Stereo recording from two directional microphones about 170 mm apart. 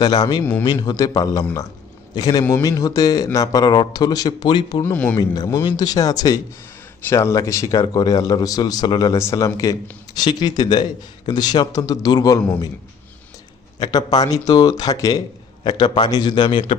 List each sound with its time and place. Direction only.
0.0 s a man's voice: 25° left (ahead or behind)
4.8 s speech: 10° left (ahead or behind)
5.1 s a man's voice: 20° left (ahead or behind)
13.7 s a man's voice: 25° left (ahead or behind)